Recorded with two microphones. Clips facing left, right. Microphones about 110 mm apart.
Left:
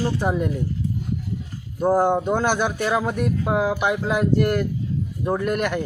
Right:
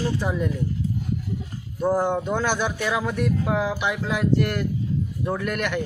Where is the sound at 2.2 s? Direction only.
50° left (ahead or behind).